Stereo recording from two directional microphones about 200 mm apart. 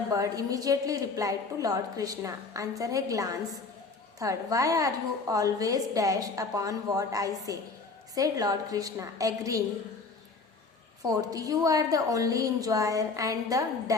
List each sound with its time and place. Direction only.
0.1 s a woman's voice: 15° right (ahead or behind)
11.0 s a woman's voice: 20° right (ahead or behind)